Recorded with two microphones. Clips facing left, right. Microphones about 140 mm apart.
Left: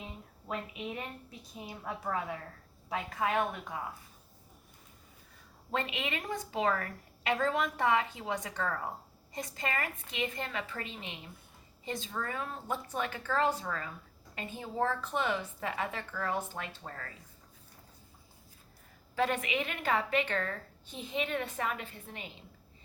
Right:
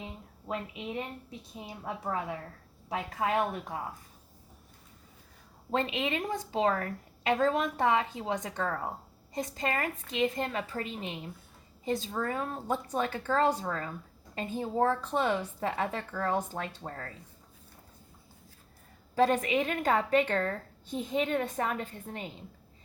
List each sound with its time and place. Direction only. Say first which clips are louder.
0.4 s a woman's voice: right 2 dB; 20° right (ahead or behind)
5.7 s a woman's voice: right 5 dB; 30° right (ahead or behind)
9.3 s a woman's voice: right 4 dB; 35° right (ahead or behind)
19.1 s a woman's voice: right 6 dB; 40° right (ahead or behind)